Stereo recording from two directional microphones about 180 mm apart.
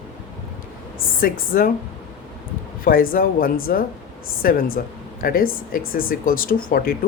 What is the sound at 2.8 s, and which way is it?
Speech, 55° left (ahead or behind).